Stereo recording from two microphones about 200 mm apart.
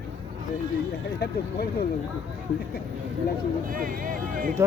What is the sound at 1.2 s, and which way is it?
Speech, 55° left (ahead or behind).